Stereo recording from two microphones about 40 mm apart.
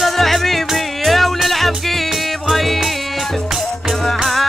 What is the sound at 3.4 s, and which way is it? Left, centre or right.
Music, centre.